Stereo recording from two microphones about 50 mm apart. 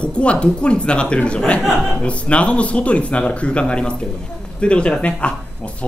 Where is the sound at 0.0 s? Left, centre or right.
Left.